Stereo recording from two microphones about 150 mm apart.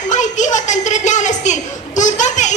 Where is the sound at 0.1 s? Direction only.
55° left (ahead or behind).